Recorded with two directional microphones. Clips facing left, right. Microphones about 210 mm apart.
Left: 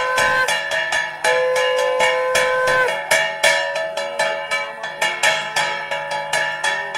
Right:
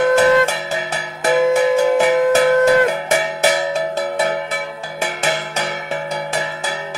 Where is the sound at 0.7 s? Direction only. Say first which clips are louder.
Right 3 dB; 40° right (ahead or behind).